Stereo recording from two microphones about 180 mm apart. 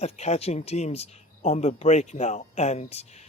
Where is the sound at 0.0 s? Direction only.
35° left (ahead or behind).